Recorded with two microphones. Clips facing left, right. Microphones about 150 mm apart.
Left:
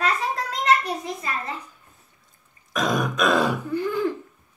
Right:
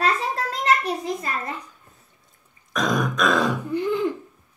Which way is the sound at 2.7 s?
5° left (ahead or behind).